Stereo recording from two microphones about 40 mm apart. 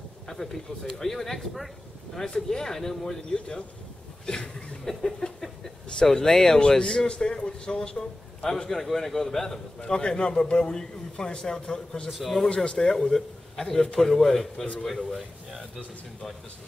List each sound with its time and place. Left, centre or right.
0.3 s speech: centre
2.2 s a man's voice: centre
3.3 s a man's voice: left
4.9 s a sound: centre
6.0 s a man's voice: centre
8.6 s a man's voice: centre
9.8 s a man's voice: left
12.1 s speech: centre
12.4 s a man's voice: left
12.7 s a man's voice: centre